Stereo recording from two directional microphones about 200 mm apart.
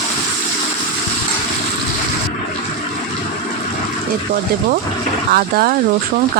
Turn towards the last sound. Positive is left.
turn(degrees=-45)  # may be behind; listen again after turning